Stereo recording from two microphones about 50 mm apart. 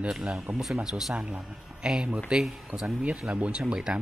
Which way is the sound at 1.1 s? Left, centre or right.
Right.